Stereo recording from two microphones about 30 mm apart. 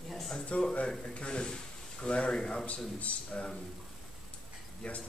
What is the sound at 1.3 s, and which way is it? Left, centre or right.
Speech, left.